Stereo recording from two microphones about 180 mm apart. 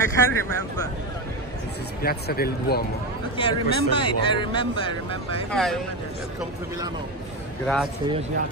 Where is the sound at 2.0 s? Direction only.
60° left (ahead or behind).